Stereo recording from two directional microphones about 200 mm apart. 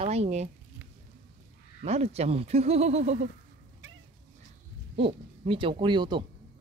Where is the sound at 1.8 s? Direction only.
30° right (ahead or behind).